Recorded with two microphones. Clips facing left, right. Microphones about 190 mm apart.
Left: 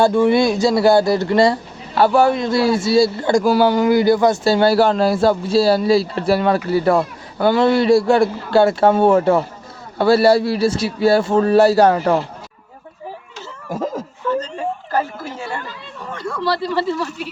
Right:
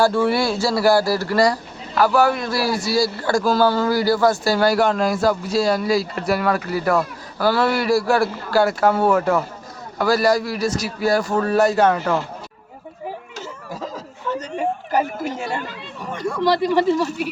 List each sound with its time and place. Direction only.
0.0 s a man's voice: 20° left (ahead or behind)
13.7 s a sound: 50° left (ahead or behind)
14.3 s speech: 15° right (ahead or behind)